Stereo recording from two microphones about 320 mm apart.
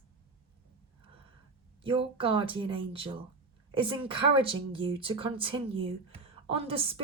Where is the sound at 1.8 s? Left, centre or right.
Centre.